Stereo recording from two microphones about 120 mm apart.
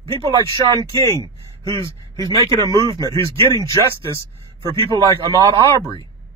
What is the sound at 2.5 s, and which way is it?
Speech, 35° right (ahead or behind).